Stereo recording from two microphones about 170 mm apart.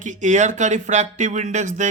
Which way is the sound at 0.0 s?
45° right (ahead or behind).